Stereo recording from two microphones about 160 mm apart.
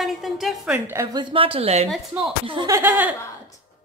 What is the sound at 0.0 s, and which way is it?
Speech, centre (ahead or behind).